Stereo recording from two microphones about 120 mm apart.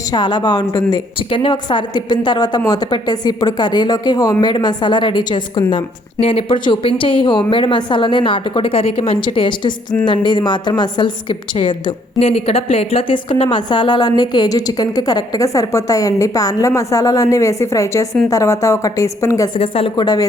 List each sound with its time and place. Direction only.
0.1 s a woman's voice: 35° left (ahead or behind)
1.3 s a woman's voice: 45° left (ahead or behind)
6.1 s a woman's voice: 50° left (ahead or behind)
12.2 s a woman's voice: 55° left (ahead or behind); by 19.5 s 25° left (ahead or behind)
19.5 s a woman's voice: 50° left (ahead or behind)
20.0 s a woman's voice: 35° left (ahead or behind)